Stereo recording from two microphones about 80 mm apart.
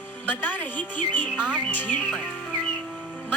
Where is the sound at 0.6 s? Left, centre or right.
Left.